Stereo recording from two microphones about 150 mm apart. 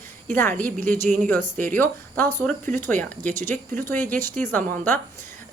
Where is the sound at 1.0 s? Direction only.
55° right (ahead or behind).